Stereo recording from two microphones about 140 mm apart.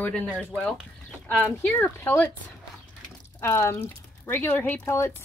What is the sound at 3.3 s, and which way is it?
Speech, 20° left (ahead or behind).